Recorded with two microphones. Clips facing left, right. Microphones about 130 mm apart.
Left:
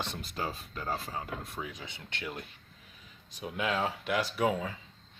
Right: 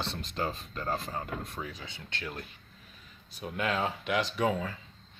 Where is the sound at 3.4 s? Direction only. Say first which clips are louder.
Even; 5° left (ahead or behind).